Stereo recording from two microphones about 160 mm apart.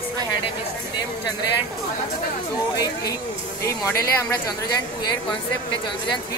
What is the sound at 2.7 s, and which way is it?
Speech, 25° left (ahead or behind).